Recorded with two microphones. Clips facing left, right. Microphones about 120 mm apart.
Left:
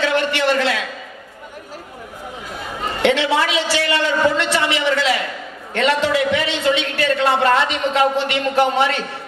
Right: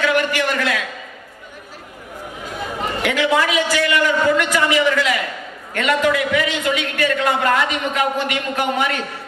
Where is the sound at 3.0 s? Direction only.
30° left (ahead or behind).